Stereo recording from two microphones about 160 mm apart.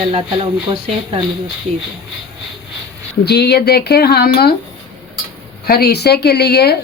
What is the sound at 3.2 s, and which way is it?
Speech, 90° left.